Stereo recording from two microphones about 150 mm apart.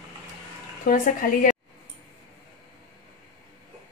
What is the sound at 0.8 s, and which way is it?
Speech, 65° left (ahead or behind).